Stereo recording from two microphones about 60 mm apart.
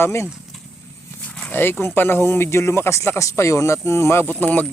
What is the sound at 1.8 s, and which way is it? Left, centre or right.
Speech, left.